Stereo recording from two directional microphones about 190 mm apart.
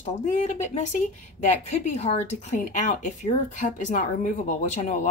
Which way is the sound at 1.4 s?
35° left (ahead or behind).